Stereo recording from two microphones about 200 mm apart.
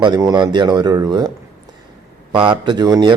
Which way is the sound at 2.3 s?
25° right (ahead or behind).